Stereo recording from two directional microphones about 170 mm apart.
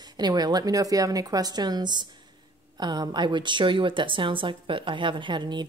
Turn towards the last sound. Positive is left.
turn(degrees=-25)  # may be behind; listen again after turning